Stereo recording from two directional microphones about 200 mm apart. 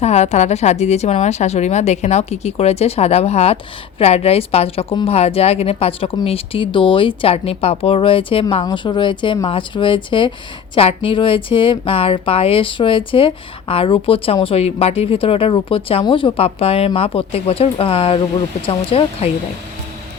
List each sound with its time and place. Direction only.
0.0 s speech: 35° left (ahead or behind)